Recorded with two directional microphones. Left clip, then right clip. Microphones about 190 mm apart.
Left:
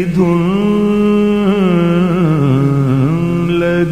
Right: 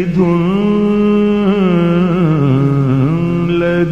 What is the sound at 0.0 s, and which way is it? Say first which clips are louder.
Mantra: even; 20° right (ahead or behind).